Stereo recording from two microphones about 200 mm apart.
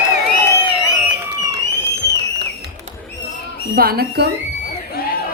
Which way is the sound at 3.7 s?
50° right (ahead or behind).